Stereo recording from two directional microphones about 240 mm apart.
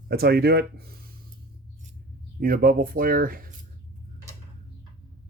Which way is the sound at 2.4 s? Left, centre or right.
Right.